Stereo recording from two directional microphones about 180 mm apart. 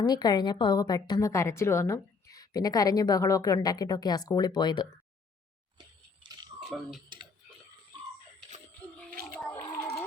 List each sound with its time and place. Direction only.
0.0 s a woman's voice: 25° left (ahead or behind)
6.6 s speech: centre (ahead or behind)
9.4 s a sound: 10° left (ahead or behind)